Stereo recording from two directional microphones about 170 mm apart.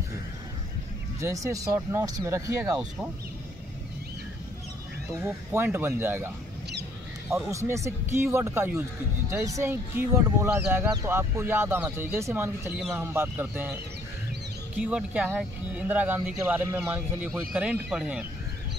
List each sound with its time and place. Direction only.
1.2 s speech: 20° right (ahead or behind)
5.2 s speech: 15° right (ahead or behind)
14.8 s speech: 5° right (ahead or behind)